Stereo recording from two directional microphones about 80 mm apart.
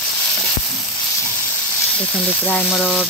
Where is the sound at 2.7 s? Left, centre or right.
Centre.